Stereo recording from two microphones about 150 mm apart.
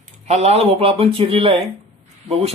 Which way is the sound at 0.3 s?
45° right (ahead or behind).